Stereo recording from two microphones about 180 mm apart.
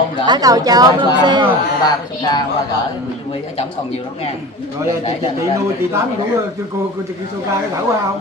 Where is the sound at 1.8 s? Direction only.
25° left (ahead or behind).